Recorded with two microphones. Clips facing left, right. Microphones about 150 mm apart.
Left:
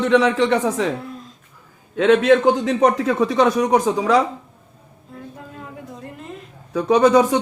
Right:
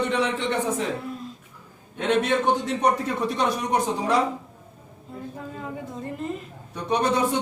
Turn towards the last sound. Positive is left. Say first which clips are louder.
# left 9 dB
turn(degrees=90)